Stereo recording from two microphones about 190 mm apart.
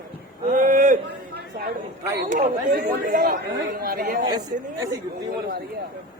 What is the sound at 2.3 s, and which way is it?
Speech, 45° right (ahead or behind).